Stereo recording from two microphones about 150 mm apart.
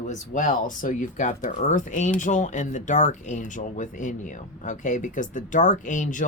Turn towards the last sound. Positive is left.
turn(degrees=60)  # may be behind; listen again after turning